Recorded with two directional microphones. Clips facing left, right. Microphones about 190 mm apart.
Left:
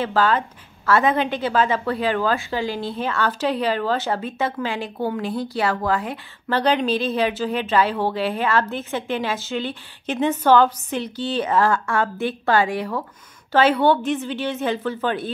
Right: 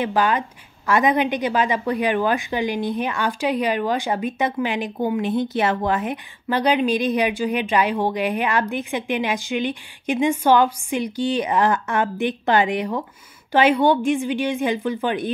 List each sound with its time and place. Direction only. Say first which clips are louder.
0.0 s a woman's voice: even; 15° right (ahead or behind)